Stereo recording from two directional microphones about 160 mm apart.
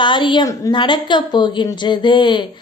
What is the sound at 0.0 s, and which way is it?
A woman's voice, 30° left (ahead or behind).